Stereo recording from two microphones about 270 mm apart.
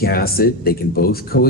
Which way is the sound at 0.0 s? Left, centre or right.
Left.